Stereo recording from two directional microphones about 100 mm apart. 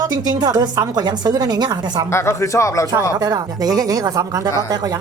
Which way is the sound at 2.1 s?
25° left (ahead or behind).